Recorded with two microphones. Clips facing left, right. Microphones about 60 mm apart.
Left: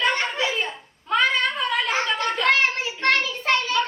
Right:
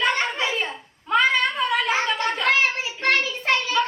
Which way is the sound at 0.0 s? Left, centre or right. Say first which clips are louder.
Even; centre.